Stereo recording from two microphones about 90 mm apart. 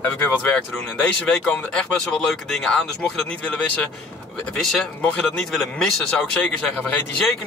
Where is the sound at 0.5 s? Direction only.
15° left (ahead or behind).